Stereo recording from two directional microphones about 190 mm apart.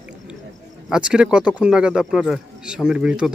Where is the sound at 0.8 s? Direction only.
5° right (ahead or behind).